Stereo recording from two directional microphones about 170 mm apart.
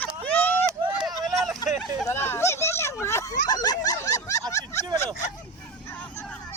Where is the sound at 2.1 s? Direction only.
15° left (ahead or behind).